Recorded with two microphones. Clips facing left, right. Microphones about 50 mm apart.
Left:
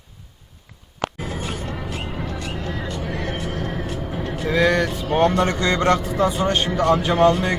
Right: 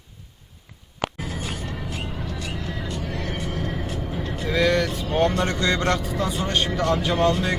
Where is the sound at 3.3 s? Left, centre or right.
Left.